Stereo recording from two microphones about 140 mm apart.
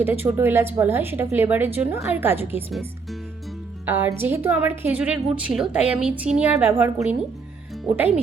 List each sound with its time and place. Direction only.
0.0 s a woman's voice: 15° right (ahead or behind)
3.8 s a woman's voice: 15° right (ahead or behind)